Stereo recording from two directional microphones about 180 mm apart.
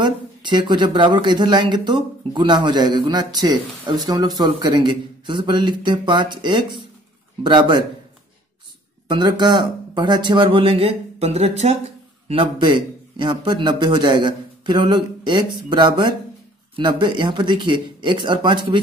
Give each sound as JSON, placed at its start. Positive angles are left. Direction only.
{"t": 0.0, "sound": "speech", "side_deg": -25}
{"t": 9.0, "sound": "speech", "side_deg": -25}